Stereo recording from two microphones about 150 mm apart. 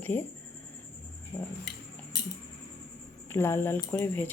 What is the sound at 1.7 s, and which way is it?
Cutlery, 90° left.